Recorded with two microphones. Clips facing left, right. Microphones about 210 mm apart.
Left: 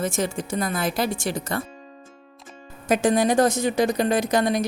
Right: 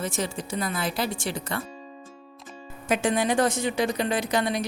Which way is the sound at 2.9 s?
40° left (ahead or behind).